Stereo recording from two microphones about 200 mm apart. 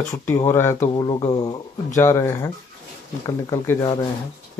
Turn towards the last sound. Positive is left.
turn(degrees=20)  # may be behind; listen again after turning